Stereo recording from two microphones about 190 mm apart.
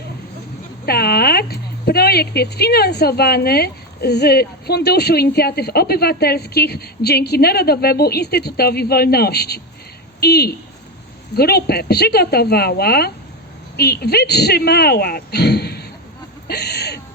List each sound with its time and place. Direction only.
0.9 s speech: 55° left (ahead or behind)